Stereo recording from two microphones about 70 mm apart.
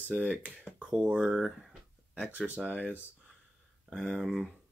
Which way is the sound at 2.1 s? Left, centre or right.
Centre.